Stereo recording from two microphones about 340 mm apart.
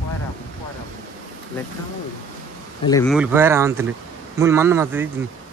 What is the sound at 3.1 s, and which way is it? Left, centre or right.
A man's voice, centre.